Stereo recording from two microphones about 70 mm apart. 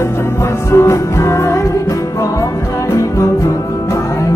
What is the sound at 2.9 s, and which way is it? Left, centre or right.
Music, left.